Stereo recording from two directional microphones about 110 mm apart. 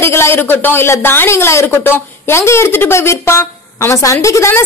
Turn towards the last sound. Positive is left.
turn(degrees=25)  # may be behind; listen again after turning